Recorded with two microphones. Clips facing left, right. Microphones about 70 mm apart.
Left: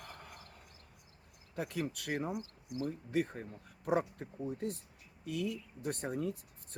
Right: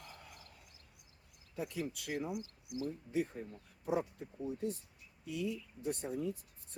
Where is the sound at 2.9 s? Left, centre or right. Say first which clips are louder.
Left 2 dB; left.